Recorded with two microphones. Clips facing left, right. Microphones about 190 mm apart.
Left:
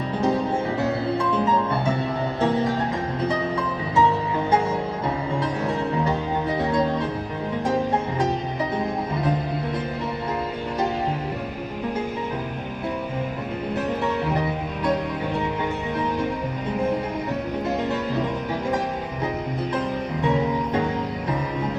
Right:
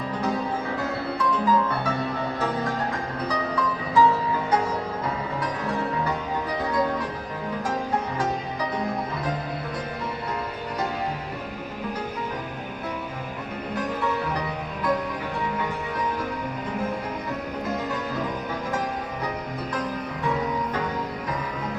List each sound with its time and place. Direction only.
1.5 s music: 25° left (ahead or behind)
3.2 s music: 25° left (ahead or behind)
5.6 s music: 25° left (ahead or behind)
20.2 s music: 25° left (ahead or behind)